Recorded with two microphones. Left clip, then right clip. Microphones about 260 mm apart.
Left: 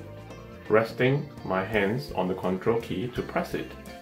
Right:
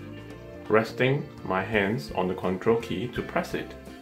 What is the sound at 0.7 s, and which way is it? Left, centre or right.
Speech, right.